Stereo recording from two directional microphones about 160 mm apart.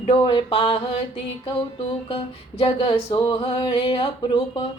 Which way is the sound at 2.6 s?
35° left (ahead or behind).